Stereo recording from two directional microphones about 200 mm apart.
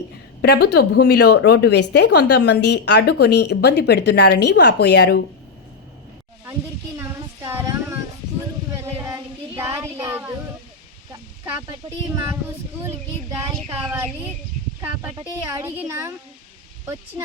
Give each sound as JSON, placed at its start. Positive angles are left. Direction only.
{"t": 0.4, "sound": "a woman's voice", "side_deg": 55}
{"t": 6.9, "sound": "a sound", "side_deg": -15}
{"t": 9.0, "sound": "child singing", "side_deg": -15}
{"t": 9.6, "sound": "a sound", "side_deg": -10}
{"t": 12.1, "sound": "speech", "side_deg": -10}
{"t": 14.8, "sound": "speech", "side_deg": -15}